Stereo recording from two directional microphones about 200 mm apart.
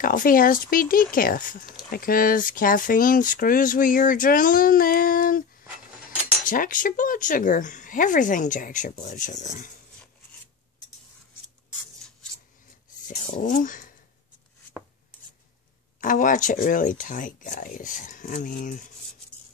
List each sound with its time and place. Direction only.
0.0 s speech: 45° left (ahead or behind)
13.4 s speech: 40° left (ahead or behind)
16.0 s speech: 40° left (ahead or behind)